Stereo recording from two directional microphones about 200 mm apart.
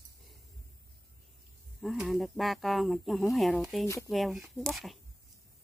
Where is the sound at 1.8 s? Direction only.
Centre (ahead or behind).